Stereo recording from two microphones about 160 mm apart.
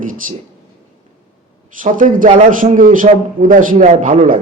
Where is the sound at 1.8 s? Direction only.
55° right (ahead or behind).